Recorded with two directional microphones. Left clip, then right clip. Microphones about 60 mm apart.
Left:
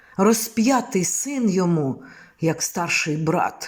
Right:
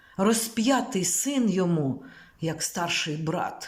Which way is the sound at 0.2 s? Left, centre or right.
Left.